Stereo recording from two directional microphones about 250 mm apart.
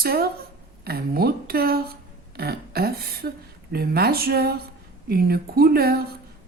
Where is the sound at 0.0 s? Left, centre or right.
Right.